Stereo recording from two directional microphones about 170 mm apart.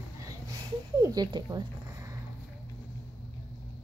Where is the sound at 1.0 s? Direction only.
25° right (ahead or behind).